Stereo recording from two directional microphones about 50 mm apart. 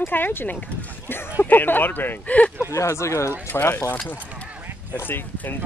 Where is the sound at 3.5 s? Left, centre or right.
Left.